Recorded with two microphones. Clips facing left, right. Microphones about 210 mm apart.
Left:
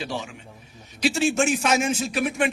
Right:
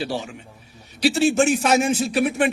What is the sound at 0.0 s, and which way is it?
A man's voice, 35° right (ahead or behind).